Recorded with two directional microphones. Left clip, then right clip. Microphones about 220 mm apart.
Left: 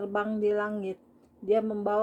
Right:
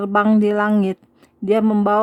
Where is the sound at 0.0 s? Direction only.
35° right (ahead or behind).